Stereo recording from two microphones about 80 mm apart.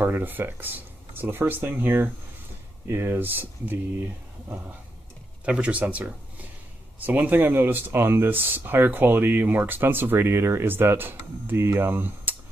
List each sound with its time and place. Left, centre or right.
0.0 s speech: right
5.4 s speech: centre